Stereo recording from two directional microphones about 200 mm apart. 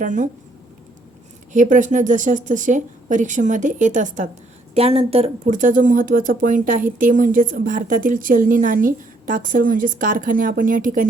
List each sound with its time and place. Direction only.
0.0 s speech: 40° right (ahead or behind)
1.5 s speech: 40° right (ahead or behind)